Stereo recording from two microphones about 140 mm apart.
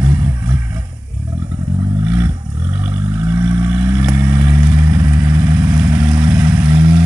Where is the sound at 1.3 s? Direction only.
25° right (ahead or behind).